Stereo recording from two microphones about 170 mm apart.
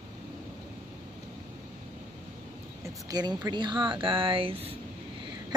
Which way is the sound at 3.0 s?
25° right (ahead or behind).